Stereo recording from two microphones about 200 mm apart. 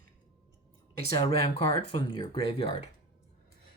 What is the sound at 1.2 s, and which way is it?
Speech, 30° left (ahead or behind).